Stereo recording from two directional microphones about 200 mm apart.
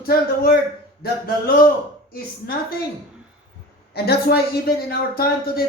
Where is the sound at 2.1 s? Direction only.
50° left (ahead or behind).